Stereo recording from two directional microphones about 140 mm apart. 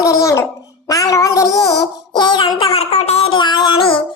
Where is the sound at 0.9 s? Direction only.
25° left (ahead or behind).